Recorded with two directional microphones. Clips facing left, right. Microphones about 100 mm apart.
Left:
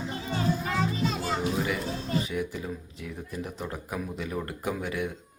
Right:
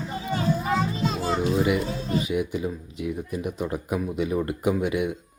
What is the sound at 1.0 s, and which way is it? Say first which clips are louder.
Children playing: right 4 dB; 30° right (ahead or behind).